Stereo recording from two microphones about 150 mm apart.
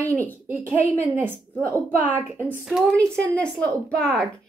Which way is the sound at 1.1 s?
15° right (ahead or behind).